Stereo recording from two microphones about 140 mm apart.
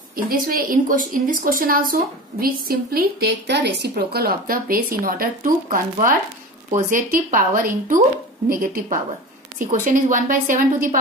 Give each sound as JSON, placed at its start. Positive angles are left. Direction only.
{"t": 0.1, "sound": "a woman's voice", "side_deg": -90}
{"t": 8.5, "sound": "speech", "side_deg": -90}
{"t": 9.6, "sound": "a woman's voice", "side_deg": -80}